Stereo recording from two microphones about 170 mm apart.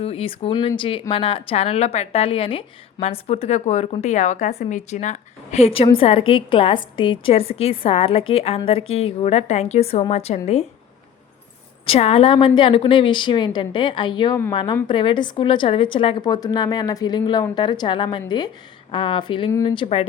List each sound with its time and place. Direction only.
0.0 s a woman's voice: 35° left (ahead or behind)
11.9 s a woman's voice: 35° left (ahead or behind)
19.5 s a woman's voice: 20° left (ahead or behind)
19.7 s a woman's voice: 35° left (ahead or behind)